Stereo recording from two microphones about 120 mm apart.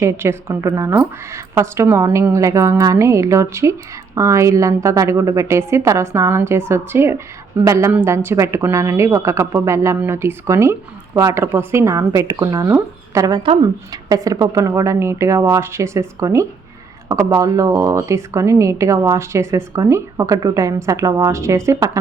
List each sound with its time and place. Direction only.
0.0 s speech: 20° right (ahead or behind)